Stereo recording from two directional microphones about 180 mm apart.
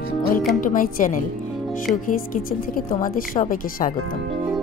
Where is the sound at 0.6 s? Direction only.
50° left (ahead or behind).